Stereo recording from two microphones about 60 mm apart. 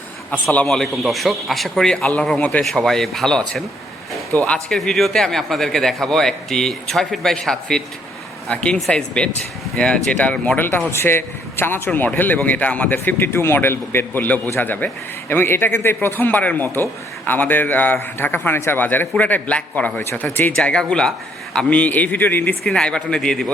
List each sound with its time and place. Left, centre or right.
0.7 s a man's voice: centre
4.3 s a man's voice: left
4.8 s a man's voice: centre; by 10.6 s left
10.9 s a man's voice: left
20.7 s a man's voice: centre; by 22.5 s left
22.6 s a man's voice: centre